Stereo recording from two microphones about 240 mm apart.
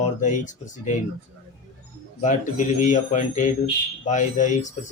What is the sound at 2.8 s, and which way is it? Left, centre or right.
A man's voice, left.